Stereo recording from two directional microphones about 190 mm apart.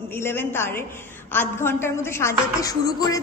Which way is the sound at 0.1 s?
10° left (ahead or behind).